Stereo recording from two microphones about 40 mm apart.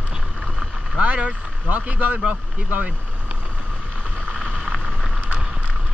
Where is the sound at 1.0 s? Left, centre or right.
Right.